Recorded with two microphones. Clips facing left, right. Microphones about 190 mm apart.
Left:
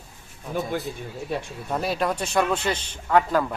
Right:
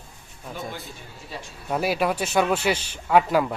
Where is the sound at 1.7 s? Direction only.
5° right (ahead or behind).